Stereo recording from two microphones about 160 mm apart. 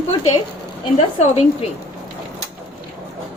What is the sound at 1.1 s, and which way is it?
Speech, 40° left (ahead or behind).